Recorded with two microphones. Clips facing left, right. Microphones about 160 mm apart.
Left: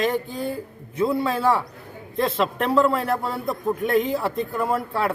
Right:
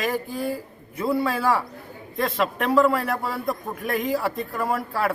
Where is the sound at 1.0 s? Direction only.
Centre (ahead or behind).